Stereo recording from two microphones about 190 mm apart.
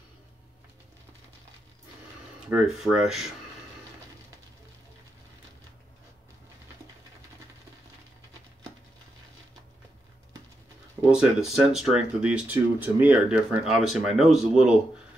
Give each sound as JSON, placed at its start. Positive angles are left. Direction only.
{"t": 2.4, "sound": "speech", "side_deg": -5}
{"t": 11.1, "sound": "speech", "side_deg": -5}